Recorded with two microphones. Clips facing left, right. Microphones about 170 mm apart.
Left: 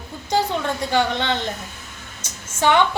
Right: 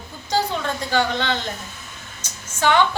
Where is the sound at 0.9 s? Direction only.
25° left (ahead or behind).